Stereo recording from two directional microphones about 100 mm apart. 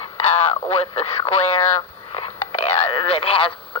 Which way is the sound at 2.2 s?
90° left.